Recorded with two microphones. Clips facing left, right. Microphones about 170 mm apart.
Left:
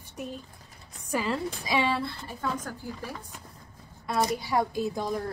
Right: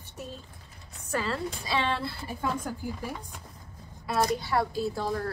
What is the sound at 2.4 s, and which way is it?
Speech, 15° right (ahead or behind).